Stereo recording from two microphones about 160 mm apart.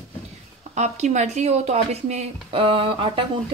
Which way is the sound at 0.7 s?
45° right (ahead or behind).